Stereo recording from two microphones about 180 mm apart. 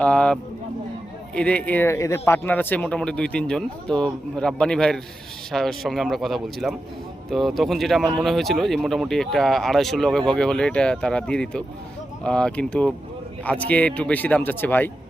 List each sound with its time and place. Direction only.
0.0 s speech: 5° left (ahead or behind)
1.4 s speech: 5° left (ahead or behind)